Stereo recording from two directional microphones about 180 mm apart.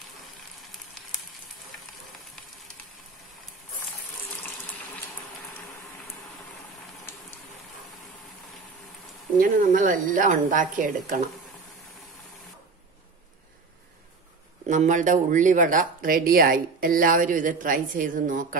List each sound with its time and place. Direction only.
0.6 s frying: centre (ahead or behind)
9.4 s speech: 50° right (ahead or behind)
14.7 s speech: 45° right (ahead or behind)